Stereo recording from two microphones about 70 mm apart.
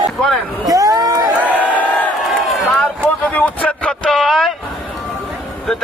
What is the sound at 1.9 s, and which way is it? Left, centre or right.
Crowd, left.